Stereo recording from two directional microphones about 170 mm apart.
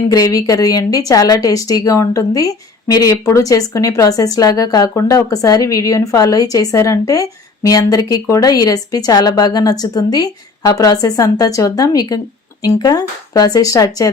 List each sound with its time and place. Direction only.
0.1 s speech: 20° left (ahead or behind)